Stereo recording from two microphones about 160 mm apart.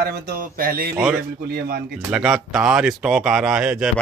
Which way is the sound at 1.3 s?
75° right (ahead or behind).